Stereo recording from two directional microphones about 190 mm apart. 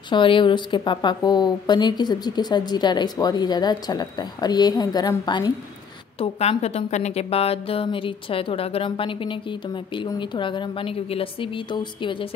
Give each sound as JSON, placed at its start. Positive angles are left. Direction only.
{"t": 0.1, "sound": "a woman's voice", "side_deg": 25}